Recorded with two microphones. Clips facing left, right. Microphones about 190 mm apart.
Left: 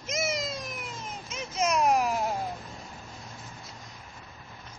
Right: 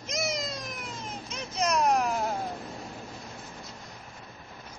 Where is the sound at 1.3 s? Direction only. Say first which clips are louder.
Left 1 dB; 5° left (ahead or behind).